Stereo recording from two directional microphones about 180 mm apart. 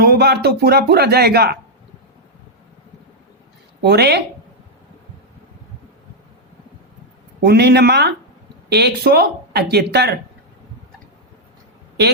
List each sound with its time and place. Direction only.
0.0 s speech: 60° right (ahead or behind)
3.8 s speech: 65° right (ahead or behind)
7.4 s speech: 65° right (ahead or behind)